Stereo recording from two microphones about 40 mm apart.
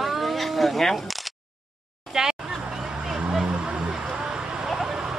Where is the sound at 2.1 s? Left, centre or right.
Centre.